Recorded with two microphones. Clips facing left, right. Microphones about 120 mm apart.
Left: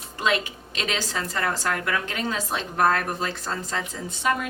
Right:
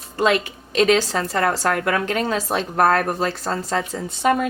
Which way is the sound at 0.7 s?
45° right (ahead or behind).